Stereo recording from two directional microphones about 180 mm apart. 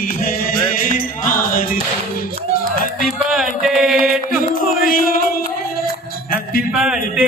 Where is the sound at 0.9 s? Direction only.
50° left (ahead or behind).